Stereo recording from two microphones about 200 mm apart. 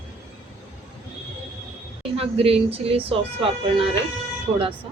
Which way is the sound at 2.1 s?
30° right (ahead or behind).